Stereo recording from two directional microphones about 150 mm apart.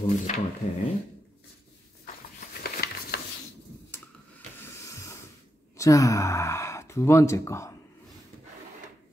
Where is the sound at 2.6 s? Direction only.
90° left.